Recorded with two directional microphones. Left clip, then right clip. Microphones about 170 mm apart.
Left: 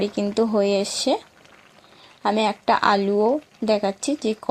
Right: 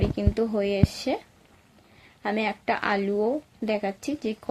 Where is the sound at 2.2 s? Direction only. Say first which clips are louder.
Left 6 dB; 30° left (ahead or behind).